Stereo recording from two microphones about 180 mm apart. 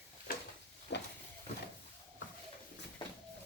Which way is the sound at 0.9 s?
65° left (ahead or behind).